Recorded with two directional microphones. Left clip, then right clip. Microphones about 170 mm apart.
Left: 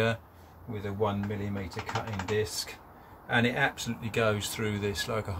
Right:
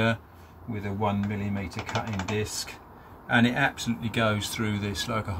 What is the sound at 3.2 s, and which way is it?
Speech, 20° left (ahead or behind).